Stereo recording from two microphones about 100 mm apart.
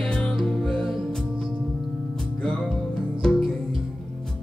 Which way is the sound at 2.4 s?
10° left (ahead or behind).